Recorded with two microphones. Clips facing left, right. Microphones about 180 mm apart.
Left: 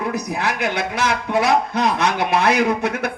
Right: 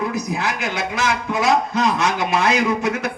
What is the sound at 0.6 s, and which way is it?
A man's voice, 60° left (ahead or behind).